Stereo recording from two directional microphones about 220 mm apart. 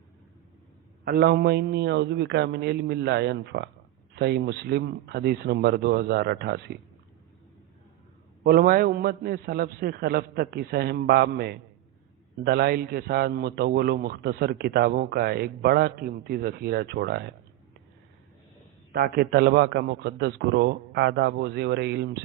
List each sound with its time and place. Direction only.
1.0 s a man's voice: 45° right (ahead or behind)
8.4 s a man's voice: 45° right (ahead or behind)
18.9 s a man's voice: 45° right (ahead or behind)